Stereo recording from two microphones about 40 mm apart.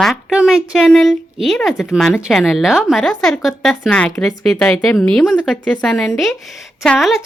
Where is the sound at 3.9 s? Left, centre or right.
Left.